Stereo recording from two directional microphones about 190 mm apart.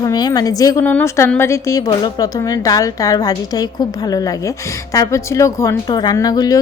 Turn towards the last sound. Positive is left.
turn(degrees=20)  # may be behind; listen again after turning